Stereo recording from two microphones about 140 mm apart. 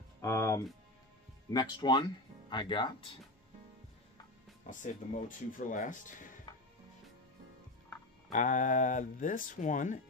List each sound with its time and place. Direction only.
0.2 s speech: 20° left (ahead or behind)
1.5 s speech: 30° left (ahead or behind)
4.6 s speech: 65° left (ahead or behind)
8.3 s speech: 65° left (ahead or behind)